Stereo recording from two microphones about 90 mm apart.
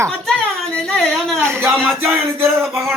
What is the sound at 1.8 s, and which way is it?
Music, 25° right (ahead or behind).